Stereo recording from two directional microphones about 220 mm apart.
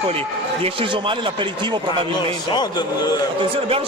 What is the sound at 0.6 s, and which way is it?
Speech, 25° right (ahead or behind).